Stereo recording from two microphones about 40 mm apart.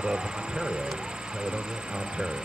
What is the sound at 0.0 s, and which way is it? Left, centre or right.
Speech, centre.